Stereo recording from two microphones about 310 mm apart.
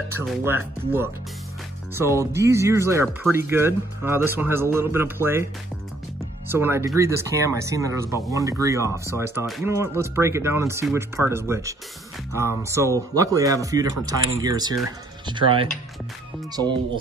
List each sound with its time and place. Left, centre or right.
0.2 s speech: centre
6.5 s speech: centre